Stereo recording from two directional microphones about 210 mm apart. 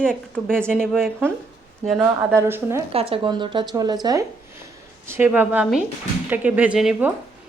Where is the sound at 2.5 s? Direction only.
10° right (ahead or behind).